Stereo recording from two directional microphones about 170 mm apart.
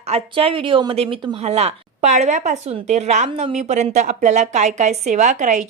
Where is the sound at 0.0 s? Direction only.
35° right (ahead or behind).